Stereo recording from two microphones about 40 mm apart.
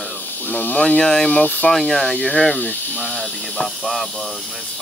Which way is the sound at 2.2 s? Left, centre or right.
Left.